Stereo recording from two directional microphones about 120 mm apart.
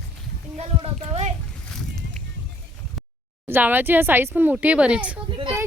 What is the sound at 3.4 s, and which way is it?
Speech, 15° right (ahead or behind).